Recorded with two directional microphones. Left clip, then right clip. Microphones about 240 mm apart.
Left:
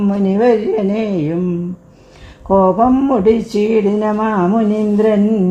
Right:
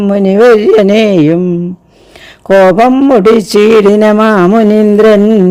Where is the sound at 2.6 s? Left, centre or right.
Right.